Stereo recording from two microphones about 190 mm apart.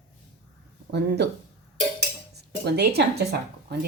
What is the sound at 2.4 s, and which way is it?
Speech, 60° right (ahead or behind).